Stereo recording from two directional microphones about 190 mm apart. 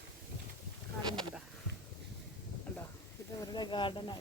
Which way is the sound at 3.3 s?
20° left (ahead or behind).